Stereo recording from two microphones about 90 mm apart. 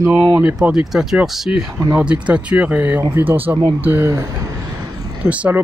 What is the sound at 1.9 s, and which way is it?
Speech, 15° right (ahead or behind).